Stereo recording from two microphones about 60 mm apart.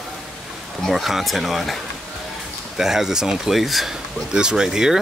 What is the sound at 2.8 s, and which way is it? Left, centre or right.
Speech, centre.